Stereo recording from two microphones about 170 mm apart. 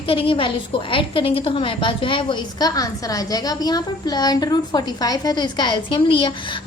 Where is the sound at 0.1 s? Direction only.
30° left (ahead or behind).